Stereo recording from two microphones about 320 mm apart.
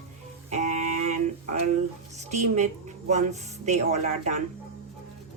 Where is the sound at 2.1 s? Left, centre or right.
Right.